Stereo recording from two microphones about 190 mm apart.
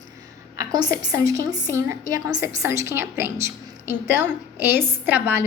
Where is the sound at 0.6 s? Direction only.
20° right (ahead or behind).